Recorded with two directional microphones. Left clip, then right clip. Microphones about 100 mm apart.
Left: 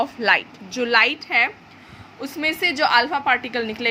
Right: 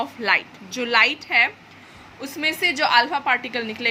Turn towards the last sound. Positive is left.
turn(degrees=30)  # may be behind; listen again after turning